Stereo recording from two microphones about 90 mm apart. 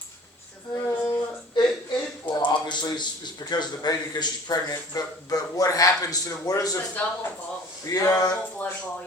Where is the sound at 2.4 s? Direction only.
55° left (ahead or behind).